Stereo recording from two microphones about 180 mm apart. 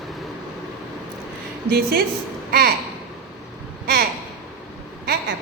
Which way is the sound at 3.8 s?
60° right (ahead or behind).